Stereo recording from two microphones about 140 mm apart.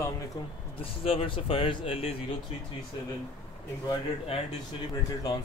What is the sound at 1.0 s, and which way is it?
Speech, 40° left (ahead or behind).